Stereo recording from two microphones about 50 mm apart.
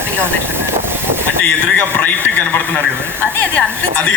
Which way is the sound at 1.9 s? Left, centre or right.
Left.